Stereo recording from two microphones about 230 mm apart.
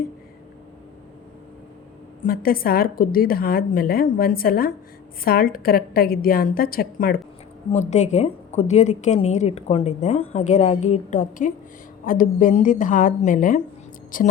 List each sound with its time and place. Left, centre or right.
2.2 s a woman's voice: left
7.7 s a woman's voice: left